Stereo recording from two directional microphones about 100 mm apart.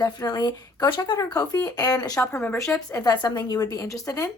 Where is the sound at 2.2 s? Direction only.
20° left (ahead or behind).